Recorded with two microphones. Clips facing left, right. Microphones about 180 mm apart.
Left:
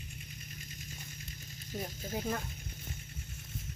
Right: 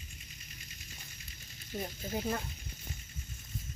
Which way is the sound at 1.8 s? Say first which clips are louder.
Right 1 dB; 5° right (ahead or behind).